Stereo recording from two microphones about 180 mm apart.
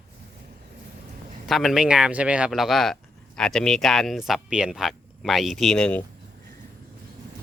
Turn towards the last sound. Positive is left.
turn(degrees=5)  # may be behind; listen again after turning